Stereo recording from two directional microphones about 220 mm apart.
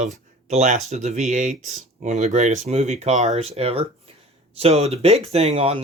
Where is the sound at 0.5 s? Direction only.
30° right (ahead or behind).